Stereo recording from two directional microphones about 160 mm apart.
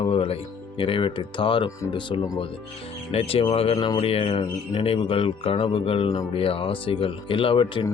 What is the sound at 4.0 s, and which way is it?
Speech, 35° left (ahead or behind).